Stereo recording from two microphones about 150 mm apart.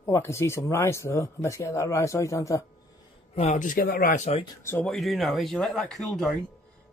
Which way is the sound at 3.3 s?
45° left (ahead or behind).